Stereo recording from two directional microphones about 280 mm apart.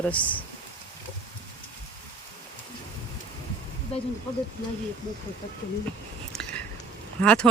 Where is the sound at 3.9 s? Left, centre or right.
Left.